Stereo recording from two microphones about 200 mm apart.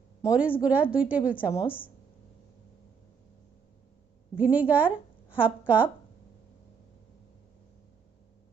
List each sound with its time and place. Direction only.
0.3 s a woman's voice: 5° right (ahead or behind)
1.5 s a woman's voice: 25° left (ahead or behind)
4.4 s speech: 10° right (ahead or behind)